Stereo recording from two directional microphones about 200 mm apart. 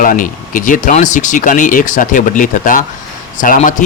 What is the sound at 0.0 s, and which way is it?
Speech, 45° left (ahead or behind).